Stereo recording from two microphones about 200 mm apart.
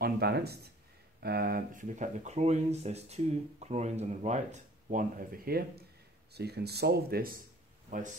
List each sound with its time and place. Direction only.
0.0 s speech: 55° right (ahead or behind)
7.9 s speech: 40° right (ahead or behind)